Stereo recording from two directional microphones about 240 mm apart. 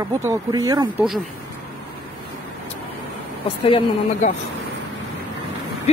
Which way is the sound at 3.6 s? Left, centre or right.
Left.